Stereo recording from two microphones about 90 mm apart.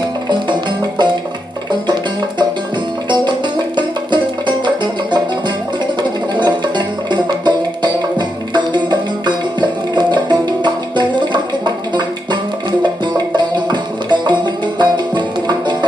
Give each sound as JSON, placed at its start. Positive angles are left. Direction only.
{"t": 0.3, "sound": "music", "side_deg": -60}
{"t": 3.1, "sound": "music", "side_deg": -55}